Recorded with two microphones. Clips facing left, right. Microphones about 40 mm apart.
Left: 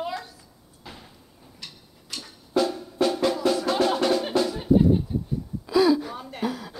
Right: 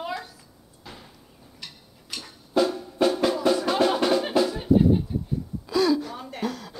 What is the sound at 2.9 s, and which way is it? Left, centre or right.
Drum, centre.